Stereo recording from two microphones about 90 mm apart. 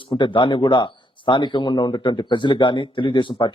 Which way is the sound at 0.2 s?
65° left (ahead or behind).